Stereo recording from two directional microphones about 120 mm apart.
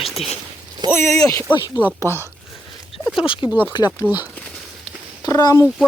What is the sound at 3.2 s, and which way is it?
Speech, 45° left (ahead or behind).